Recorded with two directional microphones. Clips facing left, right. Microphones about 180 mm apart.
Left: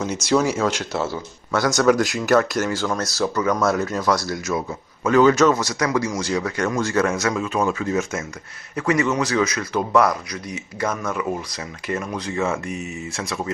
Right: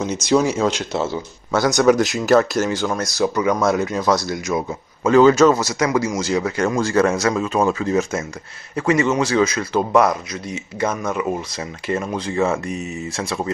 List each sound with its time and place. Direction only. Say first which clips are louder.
0.0 s speech: right 2 dB; 20° right (ahead or behind)